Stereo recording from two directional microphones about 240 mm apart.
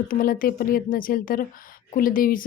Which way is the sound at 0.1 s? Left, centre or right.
Left.